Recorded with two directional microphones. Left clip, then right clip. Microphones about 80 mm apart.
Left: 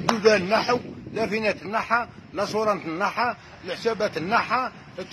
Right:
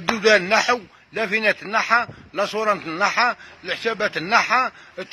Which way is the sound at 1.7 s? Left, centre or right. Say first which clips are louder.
Right 5 dB; right.